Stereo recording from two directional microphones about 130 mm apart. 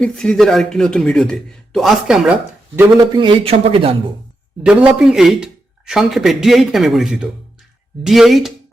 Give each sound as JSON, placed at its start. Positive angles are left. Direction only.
{"t": 0.0, "sound": "speech", "side_deg": 5}
{"t": 2.2, "sound": "speech", "side_deg": -15}
{"t": 3.0, "sound": "a man's voice", "side_deg": -40}
{"t": 4.6, "sound": "speech", "side_deg": -10}